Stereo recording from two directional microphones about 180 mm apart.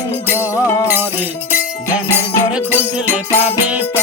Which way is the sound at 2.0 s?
10° right (ahead or behind).